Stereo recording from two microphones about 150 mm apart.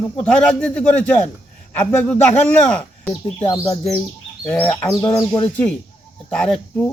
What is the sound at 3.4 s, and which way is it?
Speech, 20° left (ahead or behind).